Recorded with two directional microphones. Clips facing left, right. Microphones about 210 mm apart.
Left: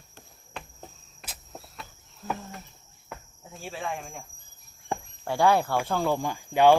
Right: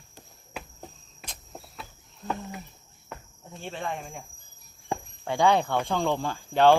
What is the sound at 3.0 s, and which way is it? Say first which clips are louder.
Cricket: even; 5° left (ahead or behind).